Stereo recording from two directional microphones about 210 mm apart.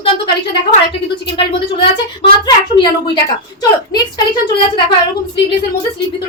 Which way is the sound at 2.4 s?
20° left (ahead or behind).